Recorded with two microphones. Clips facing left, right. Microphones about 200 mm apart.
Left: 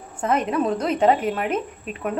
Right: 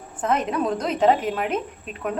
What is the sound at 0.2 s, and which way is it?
A woman's voice, 5° left (ahead or behind).